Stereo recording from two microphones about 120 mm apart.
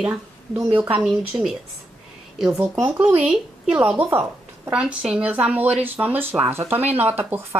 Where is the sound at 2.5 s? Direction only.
20° right (ahead or behind).